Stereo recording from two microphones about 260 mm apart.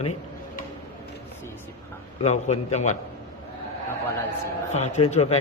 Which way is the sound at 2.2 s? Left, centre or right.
Left.